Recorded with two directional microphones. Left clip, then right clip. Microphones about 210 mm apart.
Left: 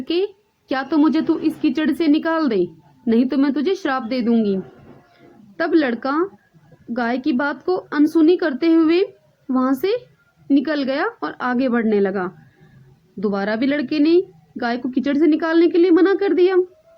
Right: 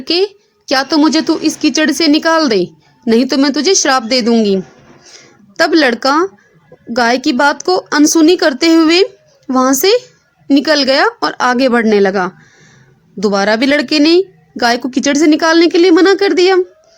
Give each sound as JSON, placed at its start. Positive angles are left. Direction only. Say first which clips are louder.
{"t": 0.0, "sound": "a woman's voice", "louder": "right 8 dB", "side_deg": -40}
{"t": 5.1, "sound": "a sound", "louder": "right 11 dB", "side_deg": -45}
{"t": 6.9, "sound": "speech", "louder": "right 9 dB", "side_deg": -40}